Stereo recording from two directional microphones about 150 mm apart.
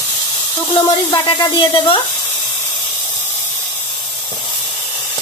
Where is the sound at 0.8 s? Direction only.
30° left (ahead or behind).